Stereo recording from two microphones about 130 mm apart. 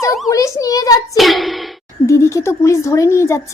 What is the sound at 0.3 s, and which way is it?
Speech, 25° left (ahead or behind).